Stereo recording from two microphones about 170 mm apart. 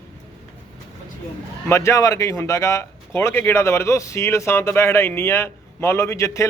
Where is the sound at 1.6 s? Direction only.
15° left (ahead or behind).